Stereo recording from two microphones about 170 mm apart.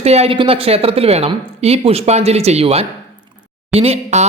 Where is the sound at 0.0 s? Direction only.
40° right (ahead or behind).